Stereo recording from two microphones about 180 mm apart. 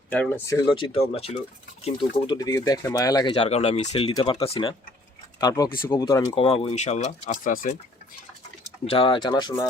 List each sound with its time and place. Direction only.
0.1 s speech: 10° left (ahead or behind)
3.3 s speech: 35° left (ahead or behind)
5.4 s speech: 20° left (ahead or behind)
6.3 s speech: 30° left (ahead or behind); by 7.8 s 50° left (ahead or behind)
8.9 s speech: 30° left (ahead or behind)